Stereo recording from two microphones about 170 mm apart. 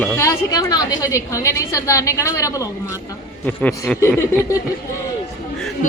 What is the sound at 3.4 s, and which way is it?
Speech, 5° left (ahead or behind).